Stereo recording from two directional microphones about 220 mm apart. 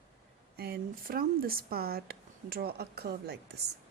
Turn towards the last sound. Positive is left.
turn(degrees=-45)  # may be behind; listen again after turning